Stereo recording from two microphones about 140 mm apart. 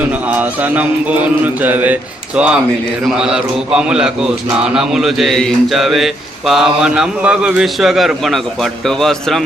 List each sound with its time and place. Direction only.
0.3 s mantra: 10° right (ahead or behind)
3.1 s a man's voice: 5° right (ahead or behind)